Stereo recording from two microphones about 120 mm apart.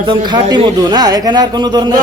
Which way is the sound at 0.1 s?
40° right (ahead or behind).